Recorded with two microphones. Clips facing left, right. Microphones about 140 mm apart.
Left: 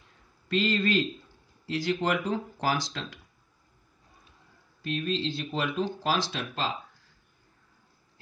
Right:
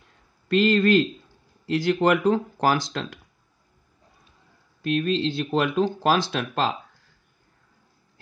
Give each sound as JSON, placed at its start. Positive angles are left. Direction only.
{"t": 0.5, "sound": "speech", "side_deg": -55}
{"t": 4.8, "sound": "speech", "side_deg": -65}